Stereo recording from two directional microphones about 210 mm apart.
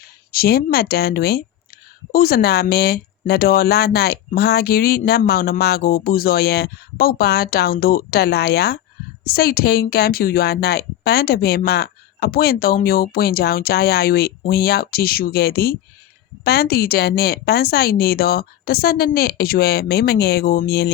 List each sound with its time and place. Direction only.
0.0 s speech: 45° left (ahead or behind)